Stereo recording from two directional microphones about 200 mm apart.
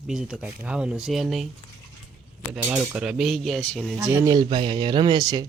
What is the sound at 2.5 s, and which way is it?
Speech, 5° right (ahead or behind).